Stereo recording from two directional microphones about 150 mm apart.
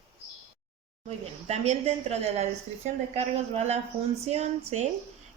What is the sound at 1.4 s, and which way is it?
Speech, 50° right (ahead or behind).